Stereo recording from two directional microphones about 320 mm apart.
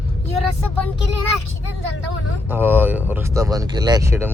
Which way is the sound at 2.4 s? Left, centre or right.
Centre.